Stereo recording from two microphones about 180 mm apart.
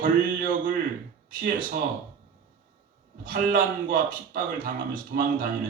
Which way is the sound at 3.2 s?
50° right (ahead or behind).